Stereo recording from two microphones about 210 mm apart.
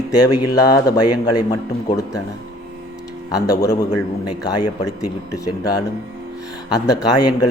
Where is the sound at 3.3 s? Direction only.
15° left (ahead or behind).